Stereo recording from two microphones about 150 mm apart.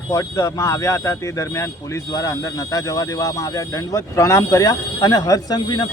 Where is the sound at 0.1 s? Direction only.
20° left (ahead or behind).